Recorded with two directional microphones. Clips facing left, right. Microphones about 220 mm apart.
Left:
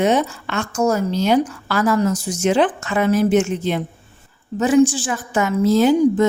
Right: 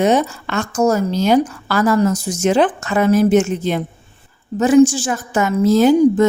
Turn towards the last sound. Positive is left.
turn(degrees=-45)  # may be behind; listen again after turning